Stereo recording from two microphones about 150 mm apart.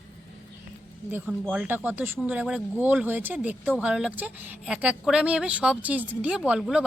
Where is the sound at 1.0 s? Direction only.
15° right (ahead or behind).